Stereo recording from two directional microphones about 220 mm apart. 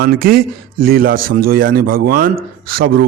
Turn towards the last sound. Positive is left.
turn(degrees=-45)  # may be behind; listen again after turning